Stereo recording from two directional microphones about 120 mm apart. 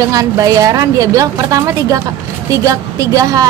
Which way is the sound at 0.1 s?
30° right (ahead or behind).